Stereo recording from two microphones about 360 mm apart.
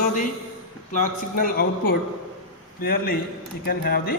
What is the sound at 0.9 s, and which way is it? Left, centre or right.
A man's voice, left.